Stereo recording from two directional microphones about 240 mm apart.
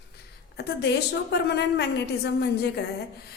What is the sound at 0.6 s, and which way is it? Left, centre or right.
A woman's voice, left.